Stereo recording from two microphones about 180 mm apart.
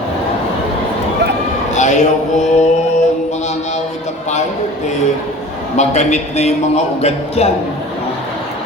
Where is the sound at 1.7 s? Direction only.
40° left (ahead or behind).